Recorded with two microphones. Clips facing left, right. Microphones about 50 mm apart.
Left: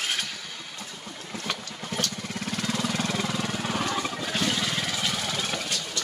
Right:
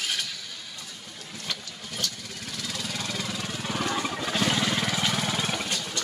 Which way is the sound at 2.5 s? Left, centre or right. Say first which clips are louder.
Left 6 dB; left.